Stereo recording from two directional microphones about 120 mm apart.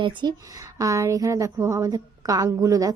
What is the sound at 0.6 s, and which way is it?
A woman's voice, 25° right (ahead or behind).